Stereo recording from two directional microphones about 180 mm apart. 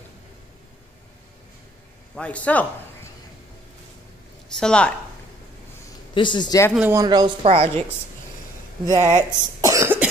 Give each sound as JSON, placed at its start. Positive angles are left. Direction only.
{"t": 2.1, "sound": "speech", "side_deg": 5}
{"t": 4.6, "sound": "a woman's voice", "side_deg": 5}
{"t": 6.1, "sound": "speech", "side_deg": 25}
{"t": 6.7, "sound": "speech", "side_deg": -10}
{"t": 7.4, "sound": "a woman's voice", "side_deg": -35}
{"t": 8.8, "sound": "cough", "side_deg": -15}